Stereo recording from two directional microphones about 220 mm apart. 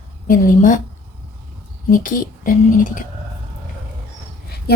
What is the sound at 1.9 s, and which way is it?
A woman's voice, 35° left (ahead or behind).